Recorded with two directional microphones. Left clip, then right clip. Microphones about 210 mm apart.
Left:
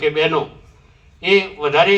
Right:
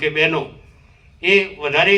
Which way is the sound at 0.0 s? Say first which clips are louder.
Left 1 dB; 15° right (ahead or behind).